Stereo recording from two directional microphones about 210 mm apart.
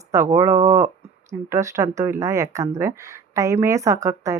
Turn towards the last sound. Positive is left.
turn(degrees=-15)  # may be behind; listen again after turning